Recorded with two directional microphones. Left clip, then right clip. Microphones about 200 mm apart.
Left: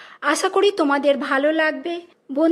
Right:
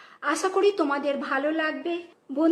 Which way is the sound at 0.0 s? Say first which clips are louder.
Left 6 dB; 45° left (ahead or behind).